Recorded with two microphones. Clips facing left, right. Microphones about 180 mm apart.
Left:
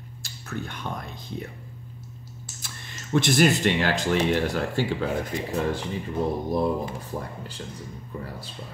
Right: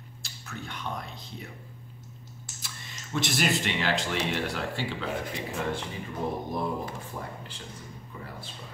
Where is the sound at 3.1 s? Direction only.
50° left (ahead or behind).